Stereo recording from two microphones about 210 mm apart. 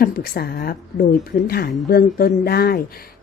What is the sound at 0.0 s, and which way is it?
A woman's voice, 50° left (ahead or behind).